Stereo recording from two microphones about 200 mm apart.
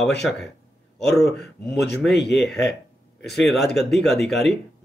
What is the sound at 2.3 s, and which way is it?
Speech, centre (ahead or behind).